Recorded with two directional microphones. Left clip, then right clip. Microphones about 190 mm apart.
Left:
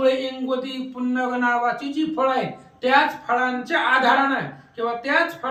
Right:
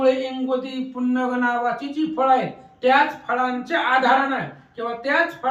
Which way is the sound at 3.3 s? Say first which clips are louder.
Left 1 dB; 5° left (ahead or behind).